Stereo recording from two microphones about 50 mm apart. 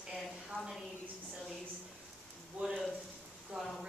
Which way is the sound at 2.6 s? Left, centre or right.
Right.